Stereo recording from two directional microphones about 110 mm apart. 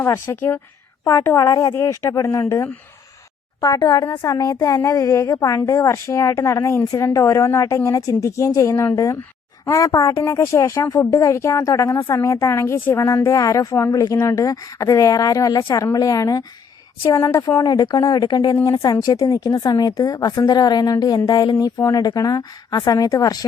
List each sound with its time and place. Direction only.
0.0 s speech: 25° left (ahead or behind)
3.6 s a woman's voice: 40° left (ahead or behind)